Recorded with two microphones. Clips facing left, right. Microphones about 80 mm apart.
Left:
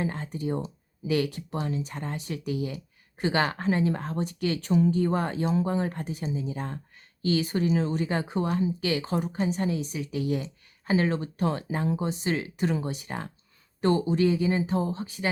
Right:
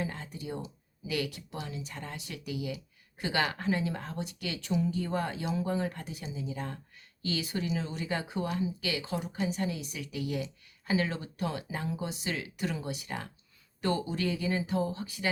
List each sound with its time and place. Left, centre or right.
0.0 s speech: left